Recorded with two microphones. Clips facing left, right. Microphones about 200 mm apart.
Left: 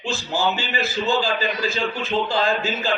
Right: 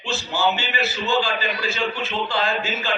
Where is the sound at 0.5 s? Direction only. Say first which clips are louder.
Left 1 dB; 35° left (ahead or behind).